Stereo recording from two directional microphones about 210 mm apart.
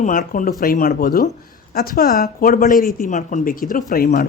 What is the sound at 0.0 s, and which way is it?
Speech, 40° left (ahead or behind).